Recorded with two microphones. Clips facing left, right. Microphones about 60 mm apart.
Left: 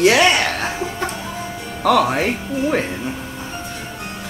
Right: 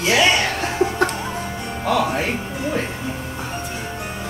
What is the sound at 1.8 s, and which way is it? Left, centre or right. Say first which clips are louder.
Speech: left 4 dB; left.